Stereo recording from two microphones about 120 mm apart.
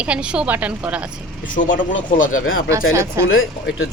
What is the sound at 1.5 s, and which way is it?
Speech, 90° left.